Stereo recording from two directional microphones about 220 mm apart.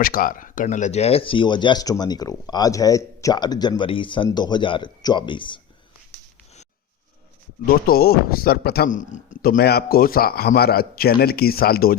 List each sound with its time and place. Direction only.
0.0 s speech: 40° left (ahead or behind); by 5.5 s 20° left (ahead or behind)
7.9 s a man's voice: 45° left (ahead or behind)